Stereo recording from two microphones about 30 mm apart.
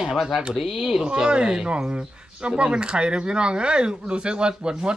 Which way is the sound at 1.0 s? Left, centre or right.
Right.